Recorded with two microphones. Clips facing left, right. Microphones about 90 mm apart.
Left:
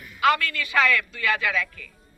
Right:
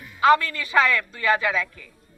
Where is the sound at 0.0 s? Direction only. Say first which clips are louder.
Right 4 dB; 25° right (ahead or behind).